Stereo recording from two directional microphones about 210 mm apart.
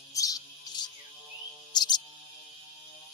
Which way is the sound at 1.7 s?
20° left (ahead or behind).